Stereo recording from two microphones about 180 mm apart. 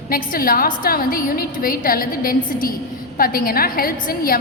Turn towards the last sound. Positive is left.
turn(degrees=55)  # may be behind; listen again after turning